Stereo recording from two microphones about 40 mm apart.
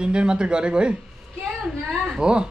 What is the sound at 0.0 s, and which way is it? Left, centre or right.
Speech, right.